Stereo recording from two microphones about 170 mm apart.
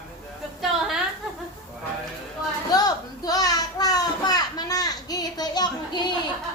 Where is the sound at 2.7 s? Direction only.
20° left (ahead or behind).